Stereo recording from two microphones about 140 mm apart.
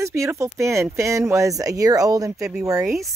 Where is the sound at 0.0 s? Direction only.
20° right (ahead or behind).